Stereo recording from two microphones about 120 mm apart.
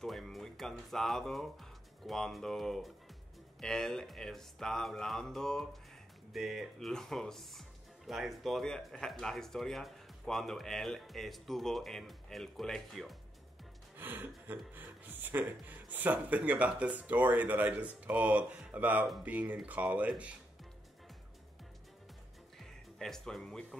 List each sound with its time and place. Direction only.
0.0 s speech: centre (ahead or behind)
13.9 s speech: 15° right (ahead or behind)
22.6 s speech: 5° left (ahead or behind)